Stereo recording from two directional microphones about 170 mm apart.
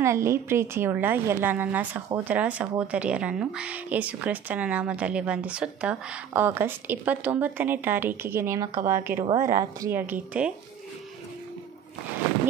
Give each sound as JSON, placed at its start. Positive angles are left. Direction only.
{"t": 0.0, "sound": "a woman's voice", "side_deg": -15}
{"t": 9.8, "sound": "a woman's voice", "side_deg": -10}